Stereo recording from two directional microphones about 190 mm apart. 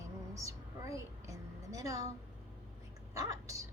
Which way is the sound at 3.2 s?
15° right (ahead or behind).